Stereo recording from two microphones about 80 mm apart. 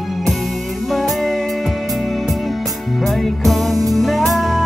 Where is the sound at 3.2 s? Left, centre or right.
Centre.